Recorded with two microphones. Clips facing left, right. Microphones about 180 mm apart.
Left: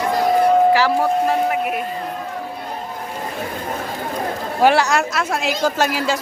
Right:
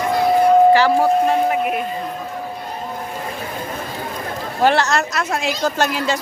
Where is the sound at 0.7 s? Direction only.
Centre (ahead or behind).